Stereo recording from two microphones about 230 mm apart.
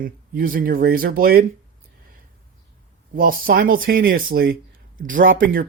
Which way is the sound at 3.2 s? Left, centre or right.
Right.